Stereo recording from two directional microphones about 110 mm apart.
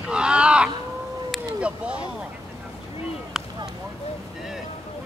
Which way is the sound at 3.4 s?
5° right (ahead or behind).